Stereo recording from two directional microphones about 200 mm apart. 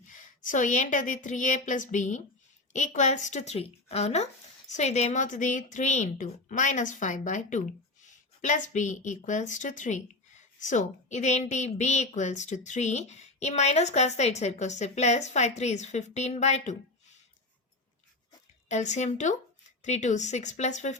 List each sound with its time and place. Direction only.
0.1 s a woman's voice: 40° left (ahead or behind)
18.7 s a woman's voice: 35° left (ahead or behind)